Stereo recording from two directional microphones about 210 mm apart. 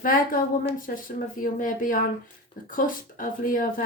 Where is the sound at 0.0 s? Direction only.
40° left (ahead or behind).